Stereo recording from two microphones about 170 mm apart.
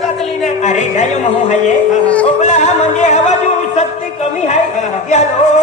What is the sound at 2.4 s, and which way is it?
Music, 45° left (ahead or behind).